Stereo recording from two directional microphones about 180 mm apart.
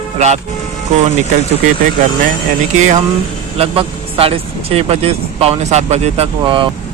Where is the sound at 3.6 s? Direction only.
30° right (ahead or behind).